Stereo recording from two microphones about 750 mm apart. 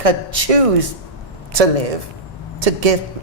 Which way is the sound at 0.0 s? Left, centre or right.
Right.